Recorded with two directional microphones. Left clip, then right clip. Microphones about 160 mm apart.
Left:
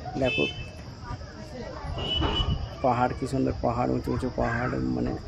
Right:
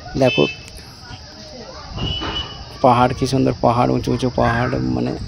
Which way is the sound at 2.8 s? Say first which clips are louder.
Right 11 dB; 60° right (ahead or behind).